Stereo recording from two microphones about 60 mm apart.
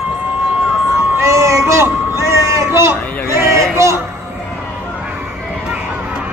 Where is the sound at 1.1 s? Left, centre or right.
Right.